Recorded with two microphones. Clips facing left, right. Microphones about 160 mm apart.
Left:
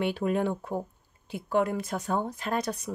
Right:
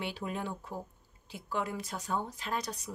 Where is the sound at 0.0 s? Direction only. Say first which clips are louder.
Left 10 dB; 55° left (ahead or behind).